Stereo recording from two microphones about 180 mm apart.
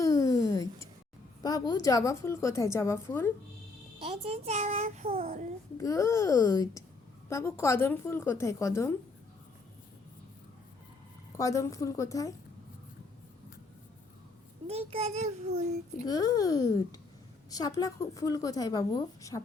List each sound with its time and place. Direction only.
0.0 s a sound: 20° left (ahead or behind)
1.4 s a woman's voice: 20° left (ahead or behind)
4.0 s a child's voice: 35° right (ahead or behind)
5.2 s a child's voice: 50° right (ahead or behind)
5.7 s a woman's voice: 20° left (ahead or behind)
11.3 s a woman's voice: 20° left (ahead or behind)
14.7 s a child's voice: 35° right (ahead or behind)
16.0 s a woman's voice: 20° left (ahead or behind)